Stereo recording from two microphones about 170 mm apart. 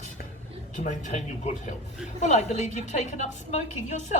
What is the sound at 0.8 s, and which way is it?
A woman's voice, 45° left (ahead or behind).